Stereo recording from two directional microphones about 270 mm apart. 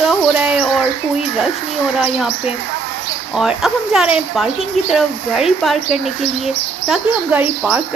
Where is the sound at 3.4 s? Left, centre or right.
Centre.